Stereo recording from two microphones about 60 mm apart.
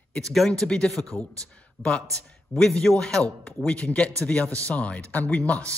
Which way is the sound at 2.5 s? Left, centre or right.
Centre.